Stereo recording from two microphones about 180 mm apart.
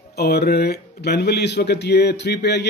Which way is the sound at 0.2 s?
60° left (ahead or behind).